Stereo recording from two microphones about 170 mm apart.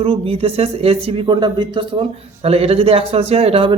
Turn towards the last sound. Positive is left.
turn(degrees=-35)  # may be behind; listen again after turning